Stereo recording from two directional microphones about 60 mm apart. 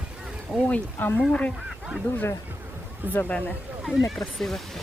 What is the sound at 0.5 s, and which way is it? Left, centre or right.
Speech, centre.